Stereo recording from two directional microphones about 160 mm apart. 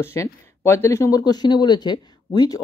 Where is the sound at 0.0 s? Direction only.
15° left (ahead or behind).